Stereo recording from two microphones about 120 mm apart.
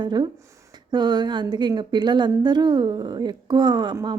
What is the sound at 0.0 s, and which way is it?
A woman's voice, 40° right (ahead or behind).